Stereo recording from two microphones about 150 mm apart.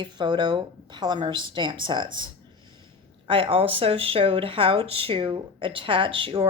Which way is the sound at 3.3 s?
35° right (ahead or behind).